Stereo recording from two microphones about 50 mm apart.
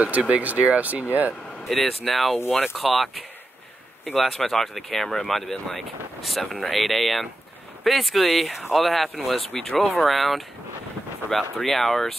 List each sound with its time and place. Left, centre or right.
0.3 s speech: right
1.7 s speech: centre
9.5 s speech: centre
9.8 s speech: centre